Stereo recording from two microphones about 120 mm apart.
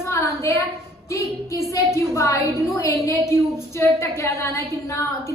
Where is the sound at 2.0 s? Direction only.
25° left (ahead or behind).